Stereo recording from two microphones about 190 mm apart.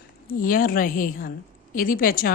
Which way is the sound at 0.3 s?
45° left (ahead or behind).